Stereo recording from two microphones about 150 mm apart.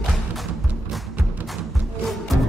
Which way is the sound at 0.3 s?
Centre (ahead or behind).